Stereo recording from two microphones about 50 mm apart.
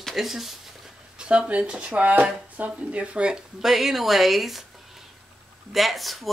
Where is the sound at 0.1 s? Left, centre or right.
Centre.